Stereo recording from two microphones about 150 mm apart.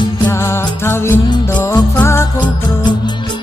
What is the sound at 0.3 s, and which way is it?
Music, 15° left (ahead or behind).